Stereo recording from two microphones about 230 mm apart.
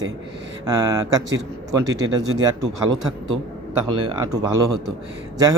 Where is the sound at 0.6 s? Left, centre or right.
Centre.